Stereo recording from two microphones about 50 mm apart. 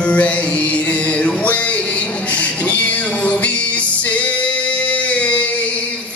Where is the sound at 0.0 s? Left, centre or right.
Left.